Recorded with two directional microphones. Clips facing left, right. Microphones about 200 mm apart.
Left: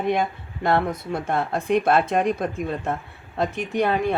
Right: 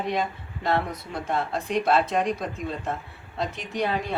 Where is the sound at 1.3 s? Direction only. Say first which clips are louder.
Left 4 dB; 55° left (ahead or behind).